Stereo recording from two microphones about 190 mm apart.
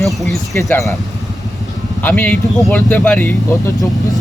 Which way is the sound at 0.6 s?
15° left (ahead or behind).